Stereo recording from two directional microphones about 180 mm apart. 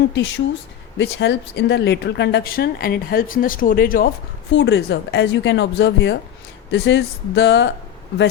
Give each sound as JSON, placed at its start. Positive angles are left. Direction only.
{"t": 0.1, "sound": "speech", "side_deg": 80}
{"t": 4.5, "sound": "speech", "side_deg": 85}